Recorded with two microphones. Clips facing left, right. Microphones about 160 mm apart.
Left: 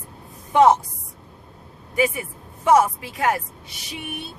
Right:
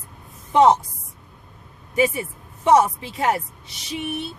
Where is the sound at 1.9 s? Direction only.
30° right (ahead or behind).